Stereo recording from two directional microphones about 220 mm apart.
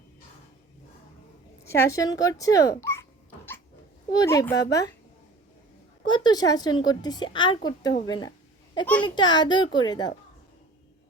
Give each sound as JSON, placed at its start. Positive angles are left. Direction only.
{"t": 1.6, "sound": "a sound", "side_deg": 10}
{"t": 4.1, "sound": "speech", "side_deg": 15}
{"t": 6.1, "sound": "a woman's voice", "side_deg": 20}